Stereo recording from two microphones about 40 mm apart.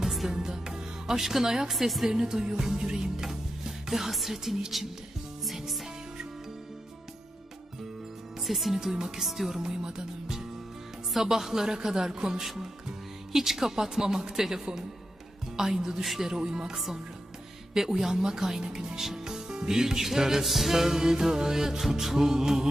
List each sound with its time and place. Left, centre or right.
0.3 s music: centre
1.7 s a woman's voice: centre
2.0 s music: centre
4.7 s a woman's voice: centre
5.5 s music: centre
8.4 s speech: centre
8.8 s music: centre
9.2 s a woman's voice: centre
9.6 s music: centre
16.0 s a woman's voice: centre
16.3 s speech: right
16.6 s music: centre